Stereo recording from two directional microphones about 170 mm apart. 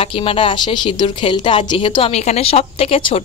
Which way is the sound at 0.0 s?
30° left (ahead or behind).